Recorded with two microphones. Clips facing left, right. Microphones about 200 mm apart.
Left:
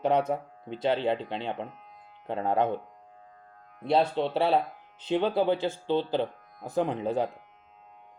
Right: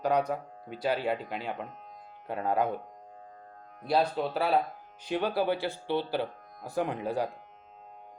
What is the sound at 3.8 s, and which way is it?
Speech, 25° left (ahead or behind).